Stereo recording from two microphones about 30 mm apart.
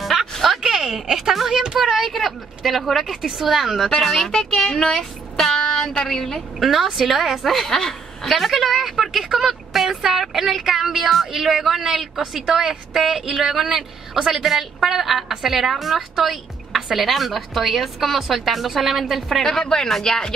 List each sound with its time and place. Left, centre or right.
0.0 s a sound: centre
0.6 s a sound: centre
1.0 s speech: centre
1.5 s speech: right
1.8 s speech: centre
2.0 s a woman's voice: centre
4.5 s speech: left
6.0 s speech: centre
6.6 s speech: centre
7.7 s a woman's voice: centre
8.3 s a woman's voice: centre
19.9 s speech: centre